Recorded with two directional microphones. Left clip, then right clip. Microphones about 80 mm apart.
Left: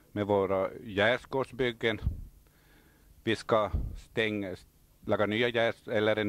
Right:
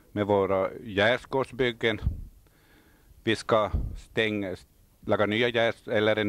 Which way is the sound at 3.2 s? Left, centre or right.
Right.